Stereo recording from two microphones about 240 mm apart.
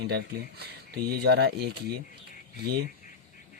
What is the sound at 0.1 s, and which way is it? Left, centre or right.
Speech, right.